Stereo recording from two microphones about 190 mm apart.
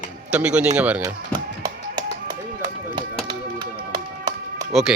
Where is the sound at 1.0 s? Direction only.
20° right (ahead or behind).